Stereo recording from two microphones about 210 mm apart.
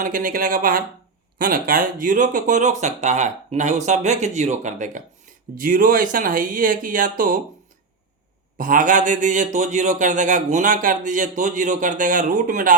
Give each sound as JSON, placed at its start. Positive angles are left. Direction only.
{"t": 0.0, "sound": "speech", "side_deg": -40}
{"t": 8.5, "sound": "speech", "side_deg": -40}